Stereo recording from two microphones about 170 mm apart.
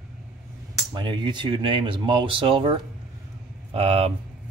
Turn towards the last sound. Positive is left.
turn(degrees=-35)  # may be behind; listen again after turning